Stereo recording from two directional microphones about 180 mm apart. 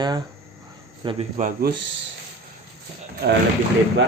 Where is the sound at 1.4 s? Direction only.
55° right (ahead or behind).